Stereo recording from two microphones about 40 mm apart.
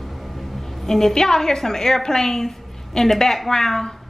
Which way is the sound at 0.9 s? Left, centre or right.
Centre.